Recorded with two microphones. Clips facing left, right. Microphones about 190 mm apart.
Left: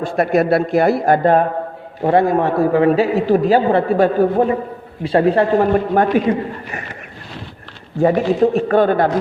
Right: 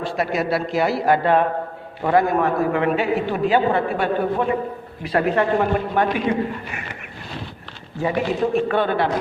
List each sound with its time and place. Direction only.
0.0 s speech: 55° left (ahead or behind)
2.0 s a man's voice: 30° left (ahead or behind)
8.0 s speech: 45° left (ahead or behind)